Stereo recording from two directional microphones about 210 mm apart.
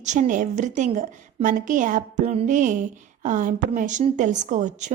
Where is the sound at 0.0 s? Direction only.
35° right (ahead or behind).